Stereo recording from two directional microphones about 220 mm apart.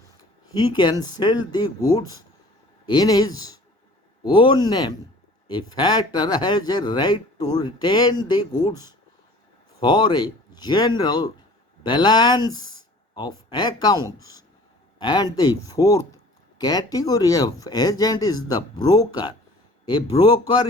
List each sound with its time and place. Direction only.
0.5 s speech: 20° left (ahead or behind)